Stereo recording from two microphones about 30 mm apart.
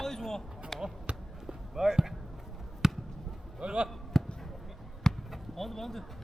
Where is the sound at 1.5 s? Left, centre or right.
Centre.